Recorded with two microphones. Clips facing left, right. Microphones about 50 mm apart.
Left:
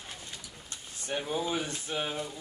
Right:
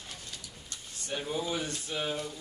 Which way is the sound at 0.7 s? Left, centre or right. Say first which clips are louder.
Left 3 dB; left.